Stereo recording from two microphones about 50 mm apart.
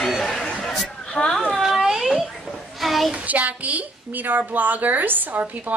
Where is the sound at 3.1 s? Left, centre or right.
Right.